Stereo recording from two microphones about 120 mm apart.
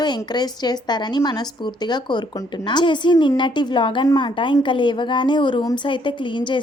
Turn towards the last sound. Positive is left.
turn(degrees=40)  # may be behind; listen again after turning